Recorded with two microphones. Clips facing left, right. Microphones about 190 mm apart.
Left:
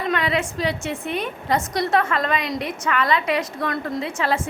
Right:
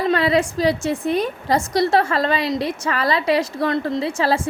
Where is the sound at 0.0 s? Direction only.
35° right (ahead or behind).